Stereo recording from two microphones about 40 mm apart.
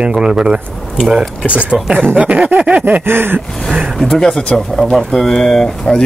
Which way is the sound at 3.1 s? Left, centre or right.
Right.